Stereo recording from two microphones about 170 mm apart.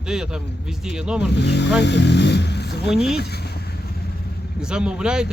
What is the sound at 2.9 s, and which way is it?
Speech, centre (ahead or behind).